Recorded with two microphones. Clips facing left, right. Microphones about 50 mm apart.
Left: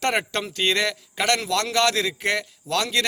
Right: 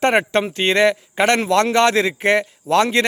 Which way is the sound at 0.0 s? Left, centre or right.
Right.